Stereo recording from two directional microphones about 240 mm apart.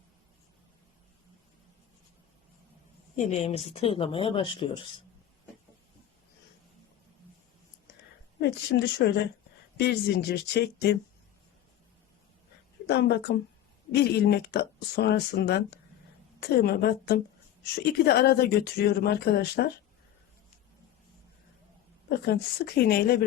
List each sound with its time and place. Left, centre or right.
3.2 s speech: left
8.4 s speech: left
12.9 s speech: left
22.3 s speech: left